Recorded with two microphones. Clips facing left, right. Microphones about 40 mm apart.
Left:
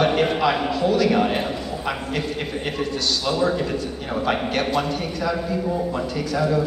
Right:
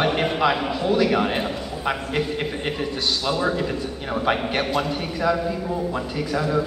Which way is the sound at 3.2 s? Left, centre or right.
Centre.